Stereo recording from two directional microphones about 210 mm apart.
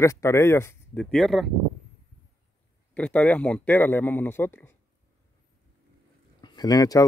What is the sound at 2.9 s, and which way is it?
Speech, 5° left (ahead or behind).